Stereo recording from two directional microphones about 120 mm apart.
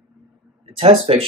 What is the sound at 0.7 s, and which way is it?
Speech, 50° right (ahead or behind).